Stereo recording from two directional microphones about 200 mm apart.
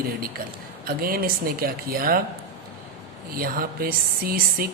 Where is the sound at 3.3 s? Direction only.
45° right (ahead or behind).